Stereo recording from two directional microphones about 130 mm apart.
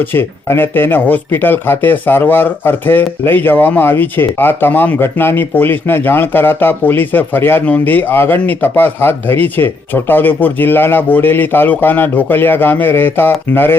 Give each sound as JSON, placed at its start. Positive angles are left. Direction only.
{"t": 0.0, "sound": "speech", "side_deg": 15}